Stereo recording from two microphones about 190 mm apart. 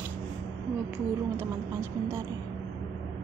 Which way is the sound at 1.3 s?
15° right (ahead or behind).